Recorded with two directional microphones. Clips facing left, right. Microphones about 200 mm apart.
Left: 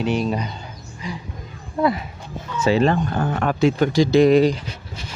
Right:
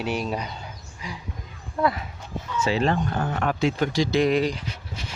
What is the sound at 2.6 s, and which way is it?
Speech, 50° left (ahead or behind).